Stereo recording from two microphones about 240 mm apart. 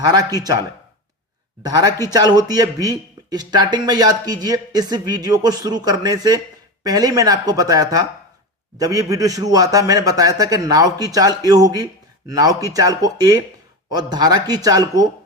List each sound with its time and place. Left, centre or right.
0.0 s speech: centre
1.6 s speech: centre